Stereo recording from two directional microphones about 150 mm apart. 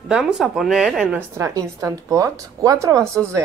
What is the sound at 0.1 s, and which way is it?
Speech, 5° right (ahead or behind).